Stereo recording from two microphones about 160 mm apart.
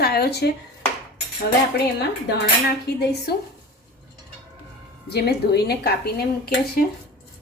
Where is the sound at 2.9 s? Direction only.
90° left.